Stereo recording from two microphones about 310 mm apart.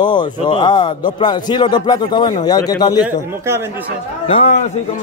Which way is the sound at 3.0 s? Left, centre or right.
Centre.